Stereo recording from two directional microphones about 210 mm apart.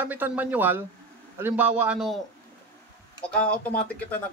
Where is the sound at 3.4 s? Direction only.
5° left (ahead or behind).